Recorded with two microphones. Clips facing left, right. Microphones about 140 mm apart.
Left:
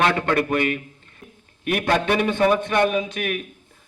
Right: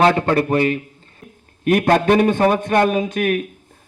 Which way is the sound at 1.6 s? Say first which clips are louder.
Right 6 dB; 45° right (ahead or behind).